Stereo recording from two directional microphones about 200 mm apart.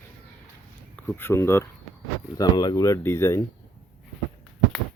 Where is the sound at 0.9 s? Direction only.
10° left (ahead or behind).